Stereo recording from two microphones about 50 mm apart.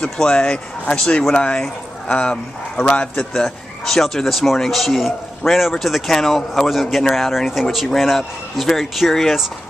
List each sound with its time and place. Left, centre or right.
0.0 s speech: centre
3.3 s speech: centre